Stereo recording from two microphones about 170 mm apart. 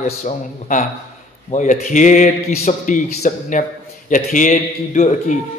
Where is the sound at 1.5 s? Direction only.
50° left (ahead or behind).